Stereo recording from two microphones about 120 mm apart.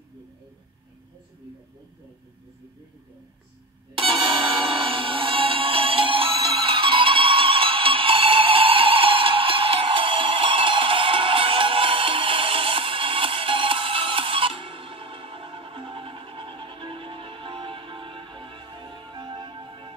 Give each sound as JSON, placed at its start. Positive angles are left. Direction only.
{"t": 4.0, "sound": "music", "side_deg": -45}